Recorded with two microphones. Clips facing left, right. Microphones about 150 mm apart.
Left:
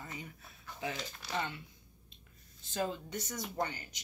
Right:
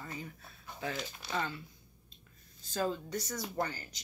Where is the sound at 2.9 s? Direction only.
20° left (ahead or behind).